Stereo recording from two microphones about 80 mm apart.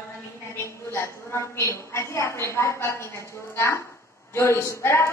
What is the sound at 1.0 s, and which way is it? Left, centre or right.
A woman's voice, left.